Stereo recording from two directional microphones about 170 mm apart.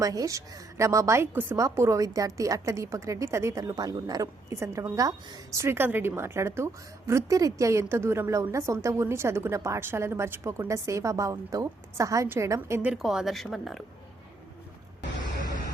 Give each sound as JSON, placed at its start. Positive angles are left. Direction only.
{"t": 0.0, "sound": "a woman's voice", "side_deg": -20}
{"t": 12.9, "sound": "speech", "side_deg": 0}